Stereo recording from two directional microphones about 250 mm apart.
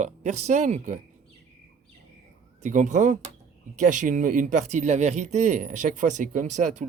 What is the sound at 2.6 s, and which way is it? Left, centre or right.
Speech, right.